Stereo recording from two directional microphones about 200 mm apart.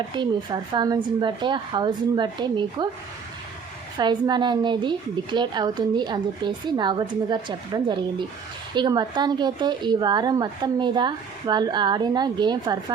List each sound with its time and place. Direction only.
0.1 s a woman's voice: 20° right (ahead or behind)
3.9 s a woman's voice: 20° right (ahead or behind)